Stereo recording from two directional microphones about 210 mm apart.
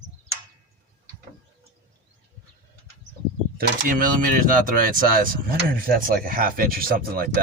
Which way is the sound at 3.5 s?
50° right (ahead or behind).